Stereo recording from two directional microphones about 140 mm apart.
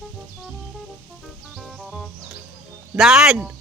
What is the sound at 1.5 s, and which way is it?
Music, centre (ahead or behind).